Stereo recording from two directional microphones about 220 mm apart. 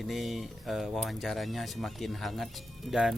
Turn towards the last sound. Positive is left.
turn(degrees=0)  # may be behind; listen again after turning